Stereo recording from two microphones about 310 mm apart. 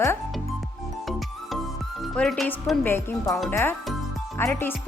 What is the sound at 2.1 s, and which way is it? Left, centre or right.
Speech, centre.